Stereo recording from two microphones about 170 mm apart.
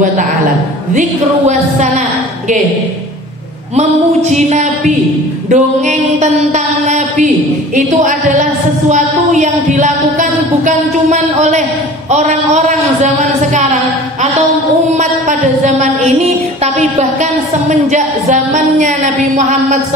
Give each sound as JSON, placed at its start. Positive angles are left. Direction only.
{"t": 0.9, "sound": "speech", "side_deg": -45}
{"t": 3.7, "sound": "speech", "side_deg": -40}
{"t": 15.0, "sound": "a sound", "side_deg": -45}
{"t": 16.7, "sound": "speech", "side_deg": -45}